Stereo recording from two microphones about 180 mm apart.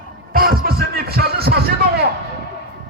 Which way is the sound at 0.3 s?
55° right (ahead or behind).